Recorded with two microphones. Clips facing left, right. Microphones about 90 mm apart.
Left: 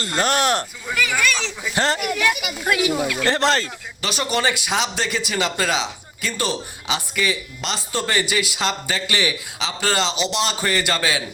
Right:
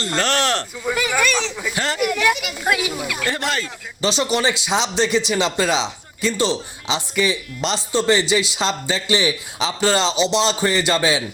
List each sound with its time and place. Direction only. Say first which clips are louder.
0.2 s speech: left 1 dB; 15° left (ahead or behind)
1.1 s speech: right 1 dB; centre (ahead or behind)
1.7 s speech: left 2 dB; 25° left (ahead or behind)
2.6 s speech: left 2 dB; 10° right (ahead or behind)
3.2 s speech: left 4 dB; 35° left (ahead or behind)
4.0 s speech: right 3 dB; 20° right (ahead or behind)